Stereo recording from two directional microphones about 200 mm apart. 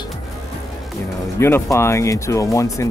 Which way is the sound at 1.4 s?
10° left (ahead or behind).